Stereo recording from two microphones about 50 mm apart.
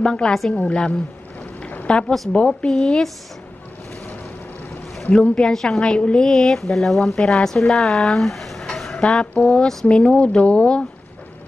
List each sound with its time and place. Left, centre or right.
0.0 s speech: centre
1.7 s a sound: left
2.3 s speech: centre
5.5 s speech: centre
8.9 s speech: centre
9.5 s speech: centre